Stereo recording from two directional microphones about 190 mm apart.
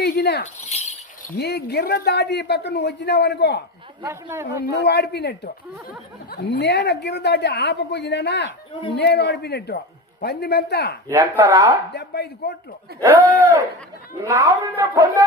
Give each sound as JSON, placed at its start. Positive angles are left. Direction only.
{"t": 0.0, "sound": "a sound", "side_deg": 60}
{"t": 0.7, "sound": "a sound", "side_deg": 35}
{"t": 1.4, "sound": "a man's voice", "side_deg": 60}
{"t": 4.0, "sound": "speech", "side_deg": -10}
{"t": 4.5, "sound": "a man's voice", "side_deg": 60}
{"t": 11.1, "sound": "speech", "side_deg": -15}
{"t": 11.9, "sound": "a man's voice", "side_deg": 60}
{"t": 14.2, "sound": "speech", "side_deg": -15}